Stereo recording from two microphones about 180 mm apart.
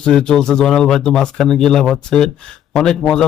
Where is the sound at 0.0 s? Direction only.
5° left (ahead or behind).